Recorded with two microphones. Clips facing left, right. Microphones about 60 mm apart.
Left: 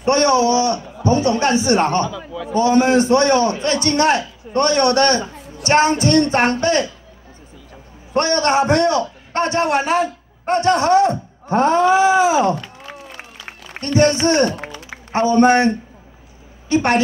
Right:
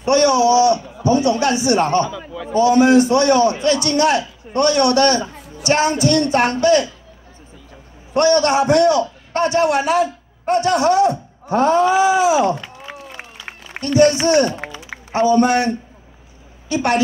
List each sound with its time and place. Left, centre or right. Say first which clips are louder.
0.0 s a man's voice: right 1 dB; left
2.0 s a man's voice: left 1 dB; right
2.5 s a man's voice: right 2 dB; left
8.1 s a man's voice: right 2 dB; left
12.5 s a sound: even; right
13.9 s a man's voice: right 2 dB; left